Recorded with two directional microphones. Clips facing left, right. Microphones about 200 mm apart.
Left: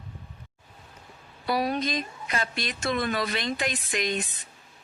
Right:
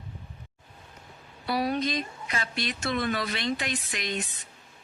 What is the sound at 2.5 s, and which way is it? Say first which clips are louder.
Speech: right 2 dB; 50° left (ahead or behind).